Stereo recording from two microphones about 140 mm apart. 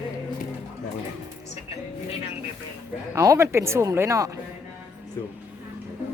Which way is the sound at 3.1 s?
20° right (ahead or behind).